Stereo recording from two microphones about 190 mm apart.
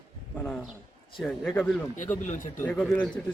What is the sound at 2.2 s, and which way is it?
Speech, 40° left (ahead or behind).